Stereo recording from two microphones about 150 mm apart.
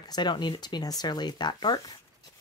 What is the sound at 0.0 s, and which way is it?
Speech, 30° left (ahead or behind).